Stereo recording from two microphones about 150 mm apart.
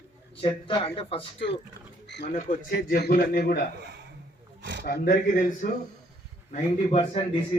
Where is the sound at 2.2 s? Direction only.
55° left (ahead or behind); by 3.7 s 85° left.